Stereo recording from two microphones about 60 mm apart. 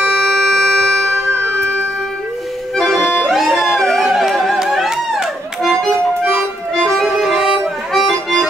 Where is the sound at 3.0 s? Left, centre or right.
Left.